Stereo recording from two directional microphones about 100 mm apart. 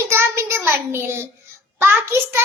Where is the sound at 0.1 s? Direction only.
25° right (ahead or behind).